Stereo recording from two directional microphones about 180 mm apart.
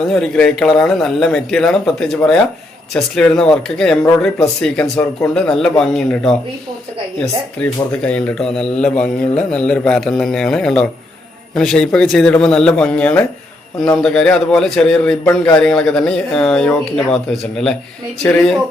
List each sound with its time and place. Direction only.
0.1 s a man's voice: 5° left (ahead or behind)
8.0 s a man's voice: 5° left (ahead or behind)
15.2 s speech: 20° left (ahead or behind)
15.5 s a man's voice: 5° left (ahead or behind)